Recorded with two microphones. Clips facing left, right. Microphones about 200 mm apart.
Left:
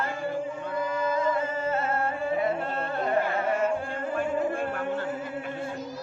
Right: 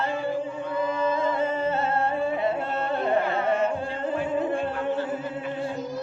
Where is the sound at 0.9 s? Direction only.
25° right (ahead or behind).